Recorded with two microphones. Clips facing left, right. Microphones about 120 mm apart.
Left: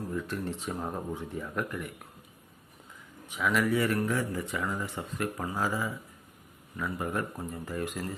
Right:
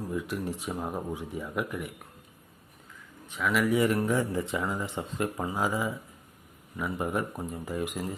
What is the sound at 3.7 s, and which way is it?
Speech, 20° right (ahead or behind).